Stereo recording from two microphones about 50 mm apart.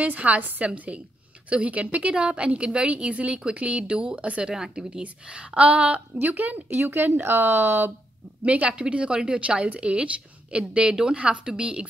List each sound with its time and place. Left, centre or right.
0.0 s a woman's voice: right
6.7 s speech: right
8.5 s a woman's voice: right